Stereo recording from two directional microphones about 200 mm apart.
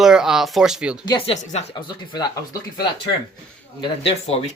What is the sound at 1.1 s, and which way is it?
Speech, 30° left (ahead or behind).